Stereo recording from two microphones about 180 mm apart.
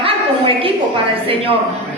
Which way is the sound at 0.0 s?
30° right (ahead or behind).